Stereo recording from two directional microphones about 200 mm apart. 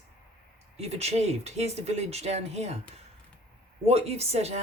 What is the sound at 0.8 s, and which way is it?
Speech, 30° right (ahead or behind).